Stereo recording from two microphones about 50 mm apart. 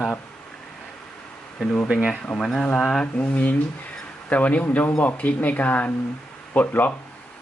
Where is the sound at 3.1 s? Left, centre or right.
Left.